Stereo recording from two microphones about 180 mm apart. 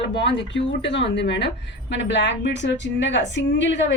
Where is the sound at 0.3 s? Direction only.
80° left.